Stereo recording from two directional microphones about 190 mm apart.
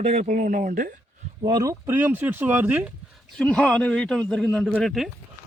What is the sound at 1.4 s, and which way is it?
A man's voice, 20° right (ahead or behind).